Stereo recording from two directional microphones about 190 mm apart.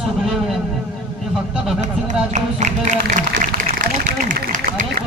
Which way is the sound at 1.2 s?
Centre (ahead or behind).